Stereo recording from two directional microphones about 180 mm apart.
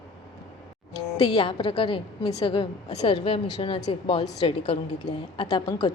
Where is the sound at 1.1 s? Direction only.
25° left (ahead or behind).